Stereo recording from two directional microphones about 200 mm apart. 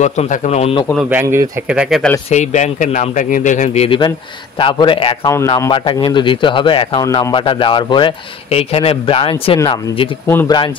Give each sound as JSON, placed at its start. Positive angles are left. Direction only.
{"t": 0.0, "sound": "speech", "side_deg": 35}
{"t": 1.2, "sound": "speech", "side_deg": -15}
{"t": 1.7, "sound": "speech", "side_deg": -5}
{"t": 2.2, "sound": "a man's voice", "side_deg": 35}
{"t": 5.3, "sound": "speech", "side_deg": 15}
{"t": 5.7, "sound": "a man's voice", "side_deg": 25}
{"t": 10.2, "sound": "speech", "side_deg": 15}